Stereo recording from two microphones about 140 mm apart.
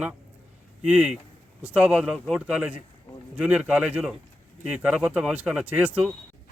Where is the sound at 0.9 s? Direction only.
5° right (ahead or behind).